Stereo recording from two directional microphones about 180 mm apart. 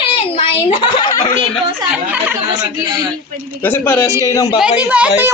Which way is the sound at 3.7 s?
15° left (ahead or behind).